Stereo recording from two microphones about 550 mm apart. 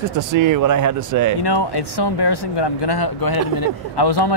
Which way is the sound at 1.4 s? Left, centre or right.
Left.